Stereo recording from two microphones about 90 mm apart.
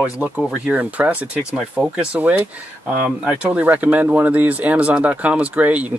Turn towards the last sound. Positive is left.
turn(degrees=-15)  # may be behind; listen again after turning